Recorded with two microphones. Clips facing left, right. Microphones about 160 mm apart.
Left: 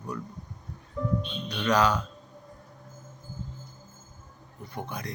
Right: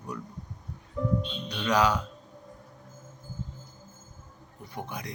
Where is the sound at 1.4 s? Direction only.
15° right (ahead or behind).